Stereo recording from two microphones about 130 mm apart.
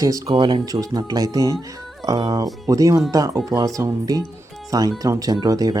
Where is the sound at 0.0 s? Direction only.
30° right (ahead or behind).